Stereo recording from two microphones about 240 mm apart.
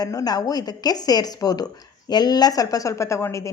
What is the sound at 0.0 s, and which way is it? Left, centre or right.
Speech, centre.